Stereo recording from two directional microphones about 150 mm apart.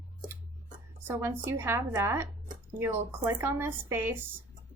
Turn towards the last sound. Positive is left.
turn(degrees=-15)  # may be behind; listen again after turning